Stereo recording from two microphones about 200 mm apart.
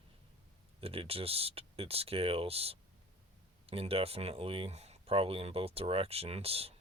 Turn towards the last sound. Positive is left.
turn(degrees=-30)  # may be behind; listen again after turning